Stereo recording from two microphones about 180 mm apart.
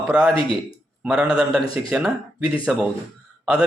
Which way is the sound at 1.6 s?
30° left (ahead or behind).